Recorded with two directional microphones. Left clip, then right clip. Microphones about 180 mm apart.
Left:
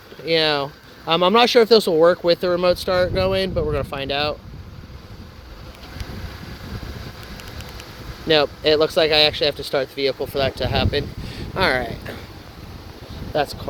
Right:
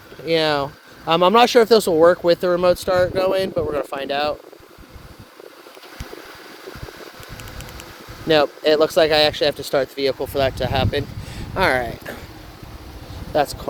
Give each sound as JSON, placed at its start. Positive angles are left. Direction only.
{"t": 0.3, "sound": "speech", "side_deg": -10}
{"t": 8.3, "sound": "speech", "side_deg": -15}
{"t": 13.3, "sound": "speech", "side_deg": -25}